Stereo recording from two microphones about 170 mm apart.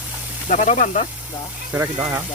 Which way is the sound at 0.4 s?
45° left (ahead or behind).